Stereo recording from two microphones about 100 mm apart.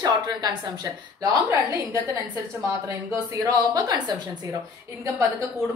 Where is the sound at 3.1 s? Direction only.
35° right (ahead or behind).